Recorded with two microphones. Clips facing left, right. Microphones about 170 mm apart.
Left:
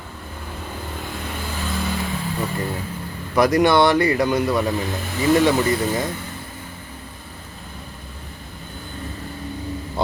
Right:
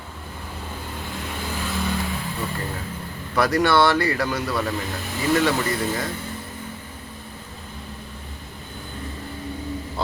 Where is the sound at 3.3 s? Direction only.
20° left (ahead or behind).